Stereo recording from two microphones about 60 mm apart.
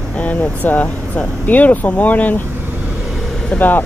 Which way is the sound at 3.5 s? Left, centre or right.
Centre.